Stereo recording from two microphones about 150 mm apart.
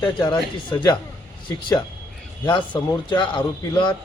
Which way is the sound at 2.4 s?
30° left (ahead or behind).